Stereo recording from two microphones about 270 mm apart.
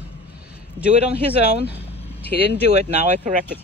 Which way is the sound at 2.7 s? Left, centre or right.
Right.